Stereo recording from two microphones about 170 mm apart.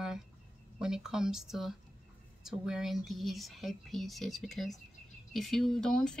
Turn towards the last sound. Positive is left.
turn(degrees=5)  # may be behind; listen again after turning